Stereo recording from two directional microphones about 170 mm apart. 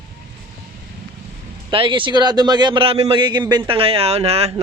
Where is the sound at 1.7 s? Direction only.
30° right (ahead or behind).